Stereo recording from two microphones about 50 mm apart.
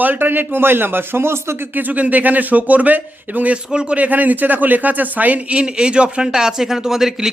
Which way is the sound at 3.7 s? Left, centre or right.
Centre.